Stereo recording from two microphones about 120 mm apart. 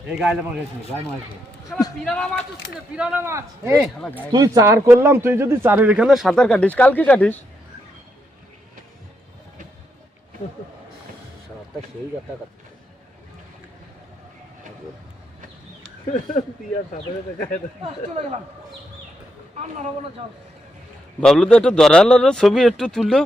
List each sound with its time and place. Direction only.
0.1 s a man's voice: 5° right (ahead or behind)
1.7 s a sound: 5° left (ahead or behind)
2.0 s speech: 5° left (ahead or behind)
2.9 s speech: 10° right (ahead or behind)
3.2 s speech: 25° right (ahead or behind); by 7.3 s 10° left (ahead or behind)
21.2 s a man's voice: 5° left (ahead or behind)